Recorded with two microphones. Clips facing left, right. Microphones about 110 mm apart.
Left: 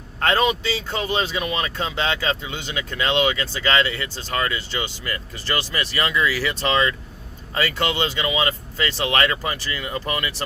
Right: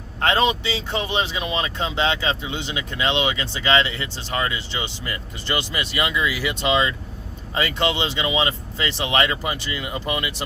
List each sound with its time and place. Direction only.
0.2 s speech: 20° right (ahead or behind)